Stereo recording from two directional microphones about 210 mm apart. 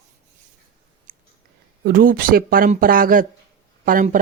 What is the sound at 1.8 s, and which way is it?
A woman's voice, 45° right (ahead or behind).